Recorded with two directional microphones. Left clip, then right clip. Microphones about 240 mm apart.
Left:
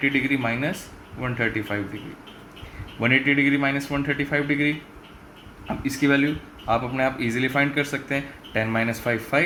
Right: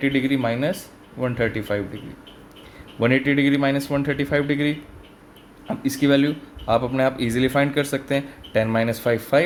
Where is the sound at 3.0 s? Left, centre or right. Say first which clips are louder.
Even; right.